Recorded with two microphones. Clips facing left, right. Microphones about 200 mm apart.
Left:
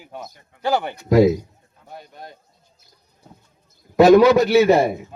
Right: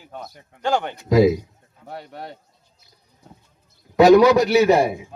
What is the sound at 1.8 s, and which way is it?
Speech, 70° right (ahead or behind).